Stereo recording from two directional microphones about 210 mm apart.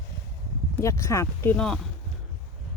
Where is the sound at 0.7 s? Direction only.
15° left (ahead or behind).